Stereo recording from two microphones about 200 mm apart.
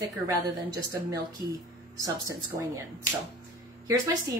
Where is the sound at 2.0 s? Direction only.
15° right (ahead or behind).